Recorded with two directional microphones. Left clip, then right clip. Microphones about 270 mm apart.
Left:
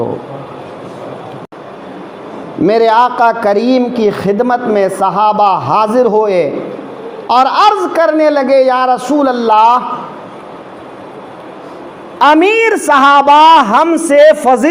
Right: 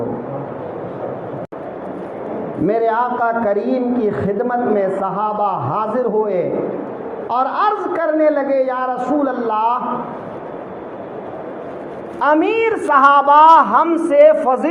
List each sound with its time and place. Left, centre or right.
2.6 s a man's voice: left
12.2 s a man's voice: left